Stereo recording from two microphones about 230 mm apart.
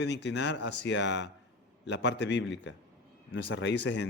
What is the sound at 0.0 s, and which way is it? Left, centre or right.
A man's voice, left.